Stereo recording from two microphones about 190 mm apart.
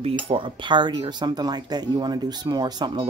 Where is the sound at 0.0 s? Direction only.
30° right (ahead or behind).